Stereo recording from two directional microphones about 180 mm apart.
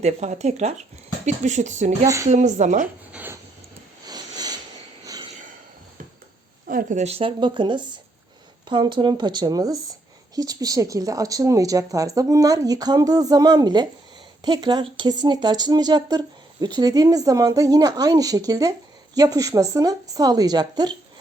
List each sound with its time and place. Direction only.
0.0 s speech: 40° right (ahead or behind)
2.8 s speech: 10° right (ahead or behind)
4.0 s sniff: 20° right (ahead or behind)
5.0 s a sound: 20° right (ahead or behind)
6.7 s speech: 50° right (ahead or behind)
7.0 s speech: 35° right (ahead or behind)